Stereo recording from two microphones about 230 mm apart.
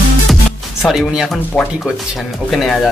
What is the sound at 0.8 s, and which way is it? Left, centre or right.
Speech, centre.